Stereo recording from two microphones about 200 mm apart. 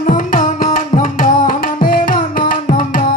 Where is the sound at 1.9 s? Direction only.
45° left (ahead or behind).